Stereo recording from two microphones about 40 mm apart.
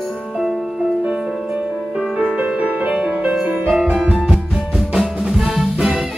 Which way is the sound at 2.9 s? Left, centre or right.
Centre.